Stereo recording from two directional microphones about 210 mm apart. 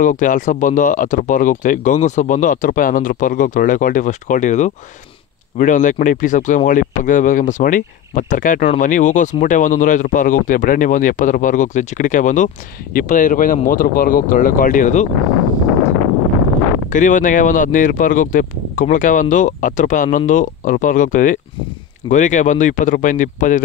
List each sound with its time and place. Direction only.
0.0 s speech: 40° left (ahead or behind)
16.9 s speech: 35° left (ahead or behind)